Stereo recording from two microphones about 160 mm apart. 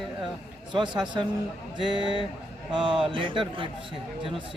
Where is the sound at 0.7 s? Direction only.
30° right (ahead or behind).